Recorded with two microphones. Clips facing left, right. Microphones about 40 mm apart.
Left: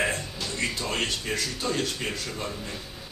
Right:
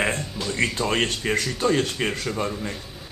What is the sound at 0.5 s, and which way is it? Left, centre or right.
Speech, right.